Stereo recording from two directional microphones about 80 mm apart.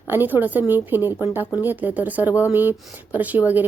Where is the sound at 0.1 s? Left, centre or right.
Right.